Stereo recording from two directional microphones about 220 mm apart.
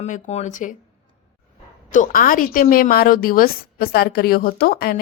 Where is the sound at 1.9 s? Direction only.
35° left (ahead or behind).